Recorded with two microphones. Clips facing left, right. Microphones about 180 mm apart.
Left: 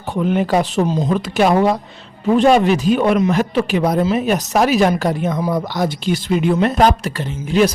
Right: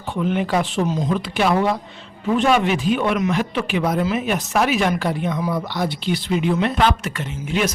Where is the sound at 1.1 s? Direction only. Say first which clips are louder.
Left 5 dB; 45° left (ahead or behind).